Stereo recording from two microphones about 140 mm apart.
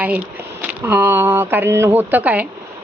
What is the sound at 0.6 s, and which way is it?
A woman's voice, 10° right (ahead or behind).